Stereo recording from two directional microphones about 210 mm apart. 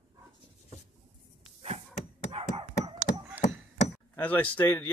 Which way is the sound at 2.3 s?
30° right (ahead or behind).